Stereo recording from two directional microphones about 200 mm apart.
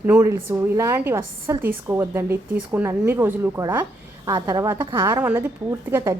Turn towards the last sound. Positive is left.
turn(degrees=-15)  # may be behind; listen again after turning